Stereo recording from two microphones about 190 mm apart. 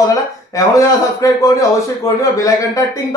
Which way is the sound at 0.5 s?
15° left (ahead or behind).